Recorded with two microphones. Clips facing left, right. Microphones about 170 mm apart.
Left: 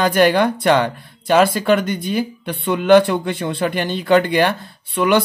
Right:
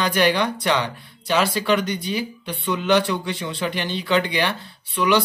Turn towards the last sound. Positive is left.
turn(degrees=50)  # may be behind; listen again after turning